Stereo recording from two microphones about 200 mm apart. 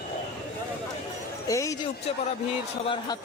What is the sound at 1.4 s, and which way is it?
Speech, 15° left (ahead or behind).